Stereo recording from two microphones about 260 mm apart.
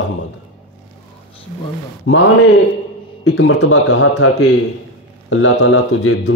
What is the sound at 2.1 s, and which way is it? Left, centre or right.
Speech, left.